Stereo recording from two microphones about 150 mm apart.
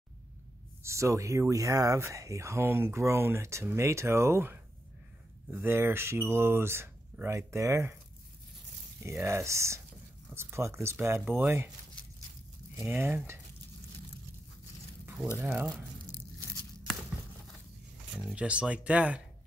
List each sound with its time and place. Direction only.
0.8 s speech: 20° right (ahead or behind)
9.0 s speech: 20° right (ahead or behind)
12.7 s speech: 15° right (ahead or behind)
15.3 s speech: 15° right (ahead or behind)
18.2 s speech: 5° right (ahead or behind)